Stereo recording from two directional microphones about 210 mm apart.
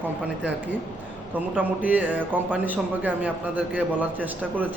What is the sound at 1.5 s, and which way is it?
A man's voice, 5° right (ahead or behind).